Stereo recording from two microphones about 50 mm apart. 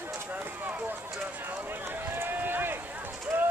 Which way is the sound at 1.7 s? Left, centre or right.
Right.